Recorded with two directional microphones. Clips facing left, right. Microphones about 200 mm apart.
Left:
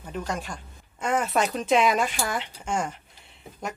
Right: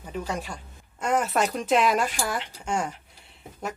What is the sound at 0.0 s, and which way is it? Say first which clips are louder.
Speech: even; 5° right (ahead or behind).